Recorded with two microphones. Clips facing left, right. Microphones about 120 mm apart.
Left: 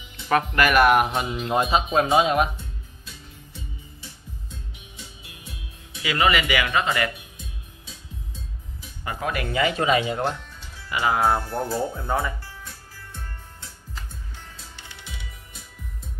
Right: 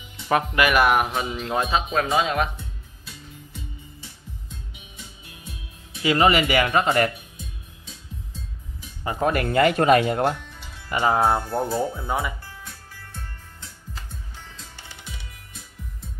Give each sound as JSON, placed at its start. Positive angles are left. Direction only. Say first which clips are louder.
{"t": 0.5, "sound": "speech", "louder": "left 2 dB", "side_deg": -5}
{"t": 1.3, "sound": "speech", "louder": "left 3 dB", "side_deg": 10}
{"t": 6.0, "sound": "speech", "louder": "right 3 dB", "side_deg": -35}
{"t": 9.2, "sound": "speech", "louder": "right 5 dB", "side_deg": -45}
{"t": 10.9, "sound": "speech", "louder": "right 2 dB", "side_deg": -40}
{"t": 11.1, "sound": "speech", "louder": "right 1 dB", "side_deg": -20}